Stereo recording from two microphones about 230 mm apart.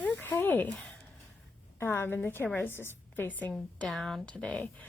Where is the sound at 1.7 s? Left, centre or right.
Centre.